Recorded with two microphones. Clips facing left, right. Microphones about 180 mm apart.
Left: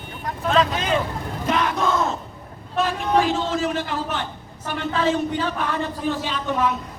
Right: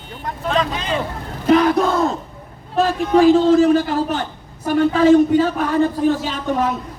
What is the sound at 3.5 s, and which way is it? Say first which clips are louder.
A man's voice: right 11 dB; 40° right (ahead or behind).